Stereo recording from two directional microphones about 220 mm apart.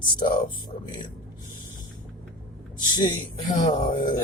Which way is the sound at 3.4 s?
35° left (ahead or behind).